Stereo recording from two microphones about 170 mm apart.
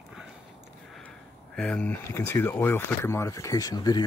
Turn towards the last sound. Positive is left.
turn(degrees=20)  # may be behind; listen again after turning